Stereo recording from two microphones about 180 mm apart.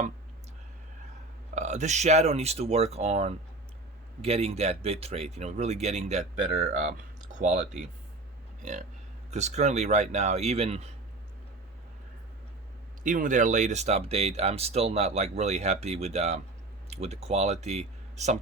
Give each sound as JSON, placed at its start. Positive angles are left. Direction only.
{"t": 1.5, "sound": "speech", "side_deg": -40}
{"t": 13.0, "sound": "speech", "side_deg": -50}